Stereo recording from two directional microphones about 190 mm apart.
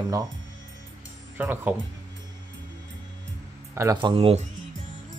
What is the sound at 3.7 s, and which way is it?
Speech, 15° right (ahead or behind).